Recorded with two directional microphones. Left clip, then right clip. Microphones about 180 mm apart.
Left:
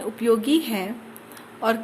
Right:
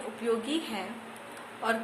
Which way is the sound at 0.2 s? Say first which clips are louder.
Left 10 dB; 45° left (ahead or behind).